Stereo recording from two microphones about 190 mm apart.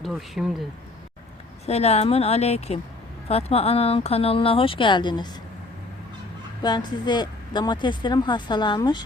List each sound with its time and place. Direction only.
0.0 s speech: centre (ahead or behind)
1.6 s speech: 35° left (ahead or behind)
6.6 s speech: 20° left (ahead or behind)